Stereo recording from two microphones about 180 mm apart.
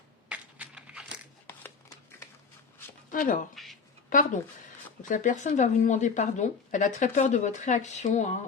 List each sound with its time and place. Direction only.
0.3 s a sound: 5° right (ahead or behind)
3.1 s a woman's voice: 45° left (ahead or behind)
3.5 s speech: centre (ahead or behind)
4.1 s a woman's voice: 50° left (ahead or behind)